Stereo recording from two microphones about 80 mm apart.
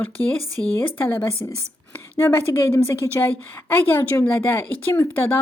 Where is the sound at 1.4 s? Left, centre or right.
Left.